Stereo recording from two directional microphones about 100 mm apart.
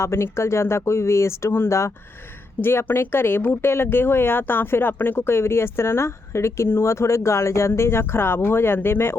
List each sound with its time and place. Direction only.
0.0 s speech: 25° left (ahead or behind)